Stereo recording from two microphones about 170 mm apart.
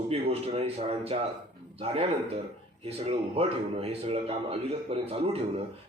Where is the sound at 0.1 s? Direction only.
35° right (ahead or behind).